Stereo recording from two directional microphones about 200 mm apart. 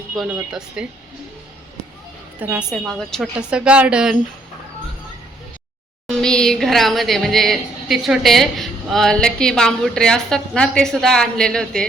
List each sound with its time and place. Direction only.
0.2 s a woman's voice: 5° right (ahead or behind)
2.4 s a woman's voice: 5° right (ahead or behind)
6.1 s a woman's voice: 5° left (ahead or behind)